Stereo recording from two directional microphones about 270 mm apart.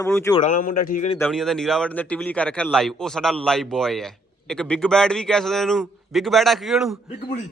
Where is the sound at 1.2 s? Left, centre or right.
Centre.